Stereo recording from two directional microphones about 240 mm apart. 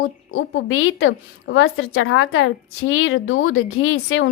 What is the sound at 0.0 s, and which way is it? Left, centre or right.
A woman's voice, left.